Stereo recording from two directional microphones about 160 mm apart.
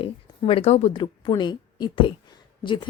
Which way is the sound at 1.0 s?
30° left (ahead or behind).